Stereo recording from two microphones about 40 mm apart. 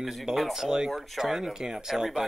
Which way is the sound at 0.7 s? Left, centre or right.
Centre.